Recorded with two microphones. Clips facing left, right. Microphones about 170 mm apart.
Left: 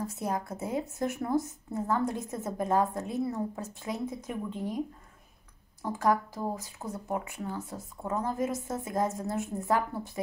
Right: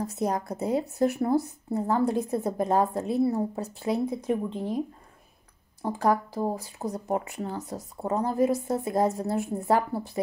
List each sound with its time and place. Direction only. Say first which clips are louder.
0.0 s a woman's voice: right 5 dB; 40° right (ahead or behind)